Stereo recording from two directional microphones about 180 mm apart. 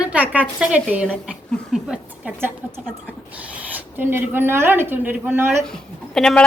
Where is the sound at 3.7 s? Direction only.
10° right (ahead or behind).